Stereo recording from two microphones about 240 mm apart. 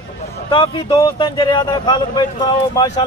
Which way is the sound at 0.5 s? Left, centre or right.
Left.